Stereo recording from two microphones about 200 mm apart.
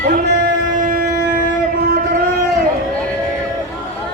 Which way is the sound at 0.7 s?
45° right (ahead or behind).